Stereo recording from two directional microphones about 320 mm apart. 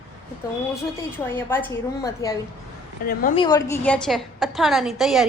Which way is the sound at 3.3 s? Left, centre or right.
Centre.